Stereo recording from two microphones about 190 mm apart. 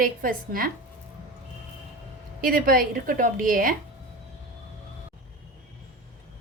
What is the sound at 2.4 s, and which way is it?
A woman's voice, 50° right (ahead or behind).